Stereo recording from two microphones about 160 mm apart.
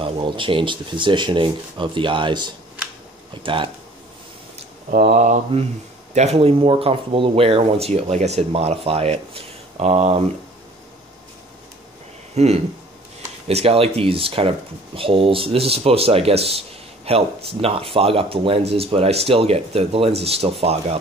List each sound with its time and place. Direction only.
0.0 s speech: 35° right (ahead or behind)
5.1 s mantra: 50° right (ahead or behind)
6.1 s speech: 40° right (ahead or behind)
12.4 s mantra: 40° right (ahead or behind)
13.5 s speech: 40° right (ahead or behind)